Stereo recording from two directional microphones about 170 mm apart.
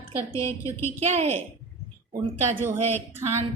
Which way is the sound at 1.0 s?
40° right (ahead or behind).